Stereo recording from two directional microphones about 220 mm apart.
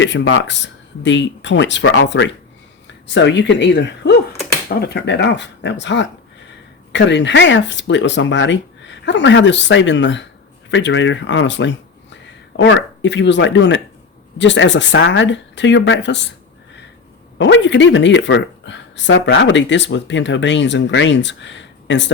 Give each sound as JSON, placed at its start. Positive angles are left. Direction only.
{"t": 0.0, "sound": "speech", "side_deg": 60}
{"t": 17.3, "sound": "speech", "side_deg": 55}